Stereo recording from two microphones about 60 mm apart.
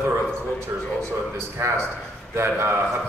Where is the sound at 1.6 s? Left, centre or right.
Right.